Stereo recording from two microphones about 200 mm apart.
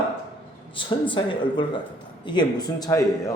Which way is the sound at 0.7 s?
25° left (ahead or behind).